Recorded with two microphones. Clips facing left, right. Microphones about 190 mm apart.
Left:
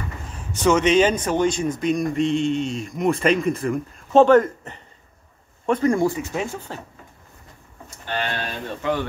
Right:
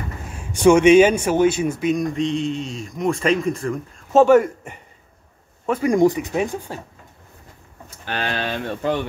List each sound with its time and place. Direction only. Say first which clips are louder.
0.3 s speech: right 5 dB; 10° right (ahead or behind)
4.2 s speech: right 1 dB; 10° right (ahead or behind)
8.0 s speech: right 2 dB; 90° right
8.8 s a man's voice: right 1 dB; 40° right (ahead or behind)